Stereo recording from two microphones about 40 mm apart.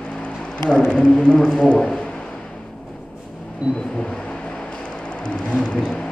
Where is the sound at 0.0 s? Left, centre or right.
Left.